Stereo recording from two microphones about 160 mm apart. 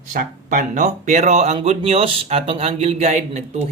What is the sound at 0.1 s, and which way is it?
Speech, 55° right (ahead or behind).